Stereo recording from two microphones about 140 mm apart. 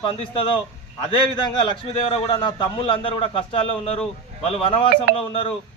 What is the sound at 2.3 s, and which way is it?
A man's voice, 35° left (ahead or behind).